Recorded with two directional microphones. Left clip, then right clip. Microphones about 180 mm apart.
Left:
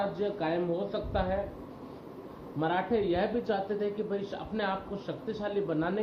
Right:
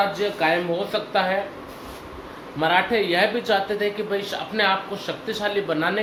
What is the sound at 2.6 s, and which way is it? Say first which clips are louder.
Speech: right 9 dB; 45° right (ahead or behind).